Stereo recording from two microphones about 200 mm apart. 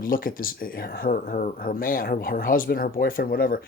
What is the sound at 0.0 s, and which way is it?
Speech, 45° left (ahead or behind).